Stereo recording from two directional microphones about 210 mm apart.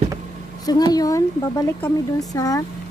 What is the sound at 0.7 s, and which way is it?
A woman's voice, 20° left (ahead or behind).